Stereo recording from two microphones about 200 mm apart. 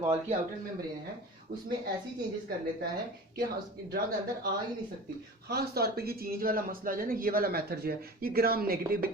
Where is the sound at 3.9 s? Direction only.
50° right (ahead or behind).